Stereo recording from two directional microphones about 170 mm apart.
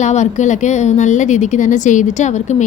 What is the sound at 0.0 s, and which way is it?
A woman's voice, 45° left (ahead or behind).